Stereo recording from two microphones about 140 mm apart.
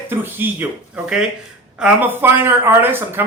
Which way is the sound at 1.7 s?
10° right (ahead or behind).